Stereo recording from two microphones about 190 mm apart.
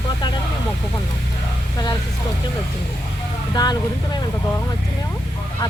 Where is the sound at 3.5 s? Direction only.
20° left (ahead or behind).